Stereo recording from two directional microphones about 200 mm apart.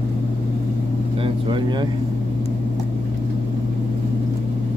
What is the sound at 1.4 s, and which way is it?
Speech, 25° right (ahead or behind).